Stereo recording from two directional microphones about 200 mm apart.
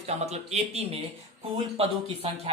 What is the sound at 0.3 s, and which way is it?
Speech, 30° right (ahead or behind).